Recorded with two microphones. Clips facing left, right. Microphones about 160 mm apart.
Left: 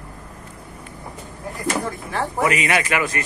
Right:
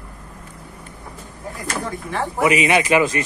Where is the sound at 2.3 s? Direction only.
15° right (ahead or behind).